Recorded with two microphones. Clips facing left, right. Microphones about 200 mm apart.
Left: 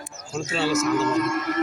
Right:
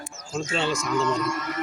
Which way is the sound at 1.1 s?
55° left (ahead or behind).